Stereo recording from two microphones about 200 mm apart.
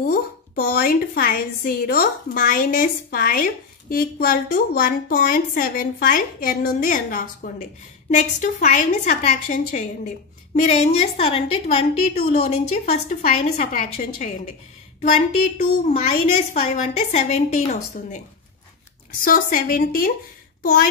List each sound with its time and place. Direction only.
0.0 s a woman's voice: 50° left (ahead or behind)
19.1 s a woman's voice: 45° left (ahead or behind)